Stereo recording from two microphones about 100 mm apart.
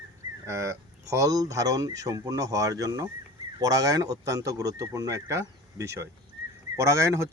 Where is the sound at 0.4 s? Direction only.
30° right (ahead or behind).